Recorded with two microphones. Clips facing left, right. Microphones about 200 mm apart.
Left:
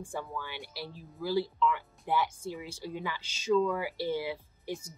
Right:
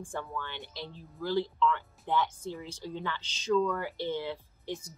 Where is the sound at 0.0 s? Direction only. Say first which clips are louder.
Even; 10° left (ahead or behind).